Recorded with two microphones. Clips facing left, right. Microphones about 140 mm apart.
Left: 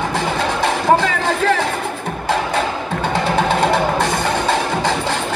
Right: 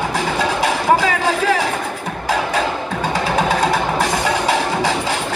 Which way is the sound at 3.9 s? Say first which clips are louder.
Even; 10° right (ahead or behind).